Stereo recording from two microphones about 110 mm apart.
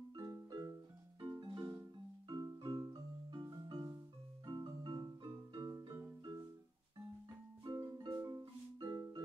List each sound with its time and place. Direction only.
0.1 s music: 35° right (ahead or behind)
7.6 s music: 35° right (ahead or behind)